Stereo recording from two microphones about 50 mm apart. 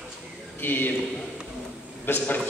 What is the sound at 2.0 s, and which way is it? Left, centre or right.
Speech, left.